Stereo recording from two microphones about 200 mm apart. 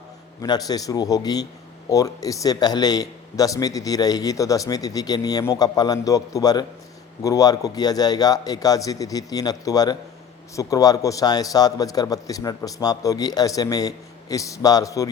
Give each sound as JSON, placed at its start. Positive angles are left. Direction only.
{"t": 0.4, "sound": "a man's voice", "side_deg": 20}